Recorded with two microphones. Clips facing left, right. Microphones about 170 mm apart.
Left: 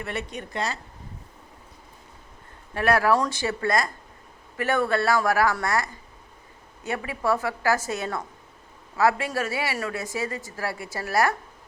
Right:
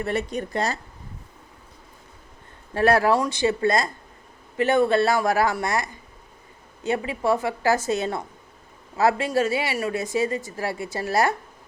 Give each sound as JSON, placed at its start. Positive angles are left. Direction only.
{"t": 0.0, "sound": "speech", "side_deg": -35}
{"t": 2.7, "sound": "speech", "side_deg": -30}
{"t": 3.2, "sound": "speech", "side_deg": -20}